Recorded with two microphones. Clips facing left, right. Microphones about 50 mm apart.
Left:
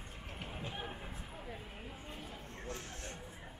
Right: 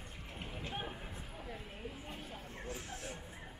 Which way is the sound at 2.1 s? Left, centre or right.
Centre.